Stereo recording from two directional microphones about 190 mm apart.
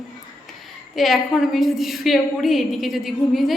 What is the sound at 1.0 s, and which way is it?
A woman's voice, centre (ahead or behind).